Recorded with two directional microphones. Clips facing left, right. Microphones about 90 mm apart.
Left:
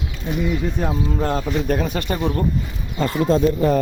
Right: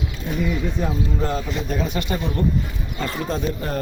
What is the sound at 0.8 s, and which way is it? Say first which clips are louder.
Speech: left 2 dB; 45° left (ahead or behind).